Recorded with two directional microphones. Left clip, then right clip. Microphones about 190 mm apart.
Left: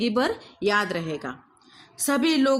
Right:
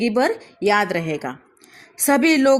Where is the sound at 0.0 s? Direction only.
20° right (ahead or behind).